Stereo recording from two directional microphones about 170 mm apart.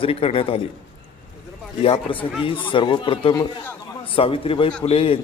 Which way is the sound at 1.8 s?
30° left (ahead or behind).